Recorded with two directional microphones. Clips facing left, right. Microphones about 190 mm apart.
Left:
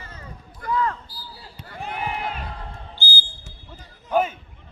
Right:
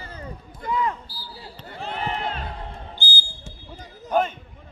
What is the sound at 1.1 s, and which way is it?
Basketball bounce, 30° right (ahead or behind).